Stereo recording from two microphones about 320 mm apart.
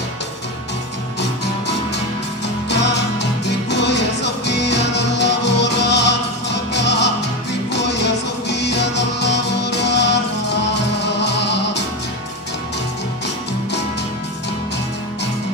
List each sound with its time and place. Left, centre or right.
2.7 s music: left